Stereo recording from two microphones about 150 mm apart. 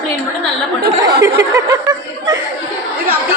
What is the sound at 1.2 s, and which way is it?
Chuckle, 20° right (ahead or behind).